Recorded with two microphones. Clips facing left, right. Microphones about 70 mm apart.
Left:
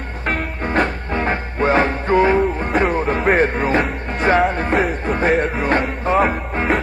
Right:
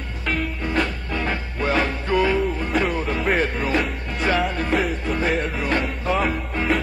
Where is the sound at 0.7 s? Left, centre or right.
Left.